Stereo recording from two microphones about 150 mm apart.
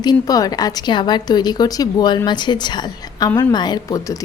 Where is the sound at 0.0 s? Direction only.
25° left (ahead or behind).